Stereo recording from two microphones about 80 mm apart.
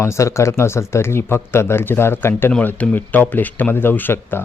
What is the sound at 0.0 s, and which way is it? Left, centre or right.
Speech, left.